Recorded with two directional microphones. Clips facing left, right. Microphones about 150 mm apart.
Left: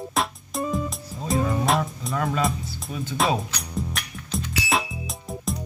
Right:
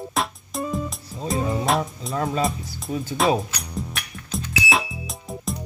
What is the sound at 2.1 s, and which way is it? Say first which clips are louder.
Speech: right 1 dB; 25° right (ahead or behind).